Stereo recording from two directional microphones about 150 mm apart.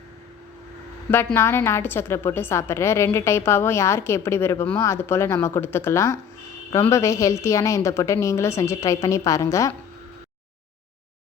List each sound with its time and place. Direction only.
1.1 s a woman's voice: 15° left (ahead or behind)